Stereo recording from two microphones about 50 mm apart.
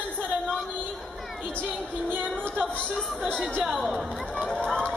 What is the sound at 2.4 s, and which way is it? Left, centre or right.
Speech, left.